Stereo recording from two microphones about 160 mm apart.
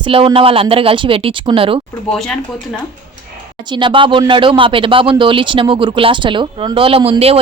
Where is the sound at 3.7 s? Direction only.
30° right (ahead or behind).